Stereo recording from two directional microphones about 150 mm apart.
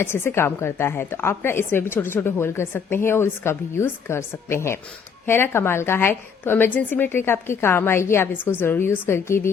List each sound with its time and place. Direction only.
0.0 s a woman's voice: 15° left (ahead or behind)